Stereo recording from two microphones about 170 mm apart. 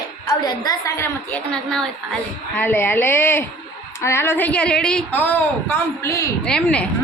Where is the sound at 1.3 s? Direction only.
5° left (ahead or behind).